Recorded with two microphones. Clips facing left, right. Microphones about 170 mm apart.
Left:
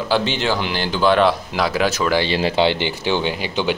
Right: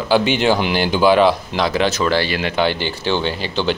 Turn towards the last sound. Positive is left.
turn(degrees=10)  # may be behind; listen again after turning